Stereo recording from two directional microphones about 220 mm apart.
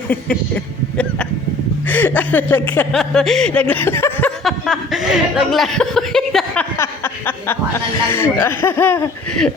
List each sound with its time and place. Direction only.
0.1 s speech: 5° left (ahead or behind)
4.4 s speech: centre (ahead or behind)